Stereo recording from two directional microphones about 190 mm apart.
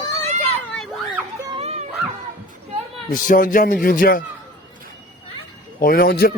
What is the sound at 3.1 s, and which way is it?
Speech, 45° left (ahead or behind).